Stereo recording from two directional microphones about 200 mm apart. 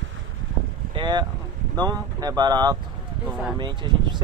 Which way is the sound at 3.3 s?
Centre (ahead or behind).